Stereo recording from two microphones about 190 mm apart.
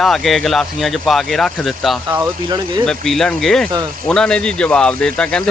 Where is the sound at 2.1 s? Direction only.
20° right (ahead or behind).